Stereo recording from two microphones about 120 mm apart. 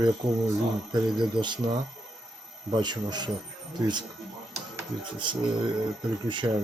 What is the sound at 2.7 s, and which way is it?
Speech, 35° right (ahead or behind).